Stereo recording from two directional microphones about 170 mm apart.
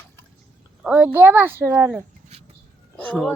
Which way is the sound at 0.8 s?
5° right (ahead or behind).